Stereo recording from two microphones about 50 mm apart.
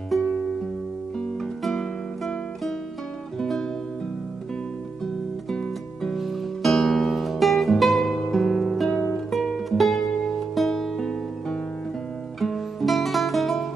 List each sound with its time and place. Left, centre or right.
1.6 s music: centre
5.0 s music: centre
6.1 s music: centre
11.1 s music: centre
12.4 s music: centre